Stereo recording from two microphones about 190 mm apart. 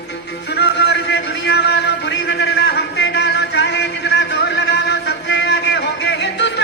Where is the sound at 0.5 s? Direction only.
60° left (ahead or behind).